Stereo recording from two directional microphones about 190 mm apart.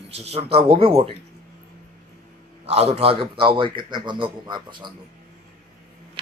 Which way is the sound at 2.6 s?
30° right (ahead or behind).